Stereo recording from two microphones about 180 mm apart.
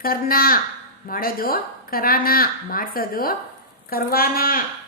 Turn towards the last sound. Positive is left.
turn(degrees=55)  # may be behind; listen again after turning